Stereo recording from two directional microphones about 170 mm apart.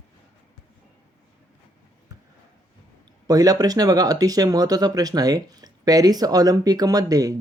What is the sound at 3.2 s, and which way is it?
Speech, 20° right (ahead or behind).